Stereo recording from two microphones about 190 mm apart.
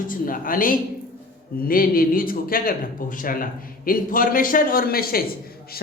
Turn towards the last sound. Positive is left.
turn(degrees=50)  # may be behind; listen again after turning